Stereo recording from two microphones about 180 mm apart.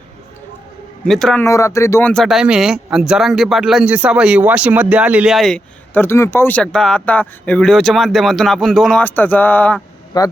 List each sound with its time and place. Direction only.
1.0 s speech: centre (ahead or behind)
1.5 s speech: 15° left (ahead or behind)
2.2 s speech: 5° right (ahead or behind)
10.1 s a man's voice: 20° left (ahead or behind)